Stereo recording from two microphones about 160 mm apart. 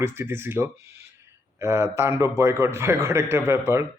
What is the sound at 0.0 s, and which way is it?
Speech, 15° right (ahead or behind).